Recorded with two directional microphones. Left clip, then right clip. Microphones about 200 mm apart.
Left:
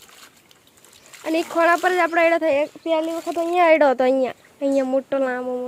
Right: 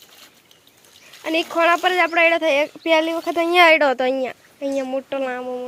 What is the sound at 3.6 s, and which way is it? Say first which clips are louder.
Speech: even; 10° left (ahead or behind).